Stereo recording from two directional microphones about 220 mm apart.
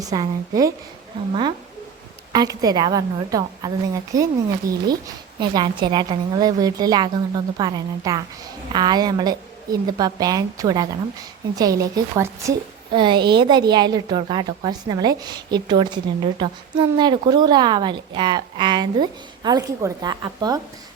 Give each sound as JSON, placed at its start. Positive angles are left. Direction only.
{"t": 0.0, "sound": "a woman's voice", "side_deg": -15}